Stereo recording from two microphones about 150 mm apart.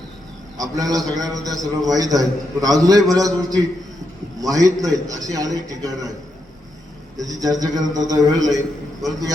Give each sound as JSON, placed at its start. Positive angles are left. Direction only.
{"t": 0.5, "sound": "a man's voice", "side_deg": -25}
{"t": 1.1, "sound": "a man's voice", "side_deg": 0}
{"t": 1.5, "sound": "a man's voice", "side_deg": -25}
{"t": 7.2, "sound": "a man's voice", "side_deg": -25}